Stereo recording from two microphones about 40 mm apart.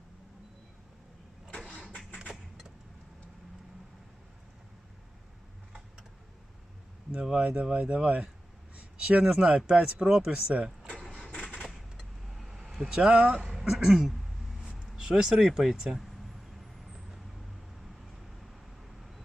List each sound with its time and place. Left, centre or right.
7.1 s speech: centre
8.7 s a sound: right
9.6 s speech: right
10.5 s speech: right
11.7 s vehicle: centre
12.8 s speech: centre
13.5 s a sound: centre
14.6 s a sound: centre
14.9 s speech: centre
16.6 s vehicle: centre